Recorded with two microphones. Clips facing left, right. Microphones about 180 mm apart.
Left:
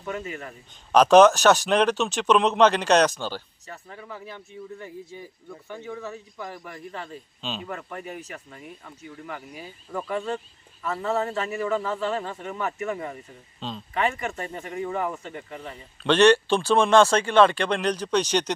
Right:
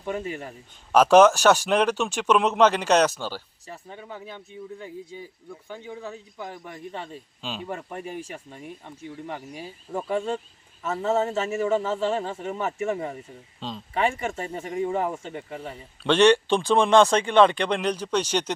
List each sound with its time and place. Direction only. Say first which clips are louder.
0.0 s a man's voice: right 2 dB; 30° right (ahead or behind)
0.9 s speech: left 1 dB; 10° right (ahead or behind)
3.7 s a man's voice: right 1 dB; 20° right (ahead or behind)
7.4 s speech: left 1 dB; 10° right (ahead or behind)
7.9 s a man's voice: right 2 dB; 30° right (ahead or behind)
13.6 s speech: even; 15° right (ahead or behind)
13.9 s a man's voice: right 1 dB; 25° right (ahead or behind)
16.1 s speech: even; 15° right (ahead or behind)